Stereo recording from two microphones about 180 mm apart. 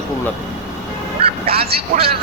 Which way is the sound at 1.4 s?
30° right (ahead or behind).